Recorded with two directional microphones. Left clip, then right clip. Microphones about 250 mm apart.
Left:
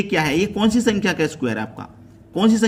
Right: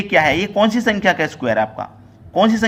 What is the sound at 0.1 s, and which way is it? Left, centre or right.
A man's voice, centre.